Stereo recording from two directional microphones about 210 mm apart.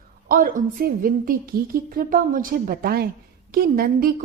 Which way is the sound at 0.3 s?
40° right (ahead or behind).